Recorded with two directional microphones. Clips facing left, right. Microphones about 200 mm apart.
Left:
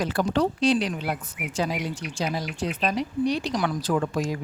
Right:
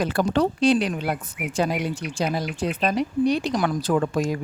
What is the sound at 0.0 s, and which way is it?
Speech, 55° right (ahead or behind).